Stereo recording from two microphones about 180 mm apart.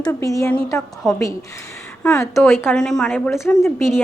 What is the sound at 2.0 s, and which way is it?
A woman's voice, 5° left (ahead or behind).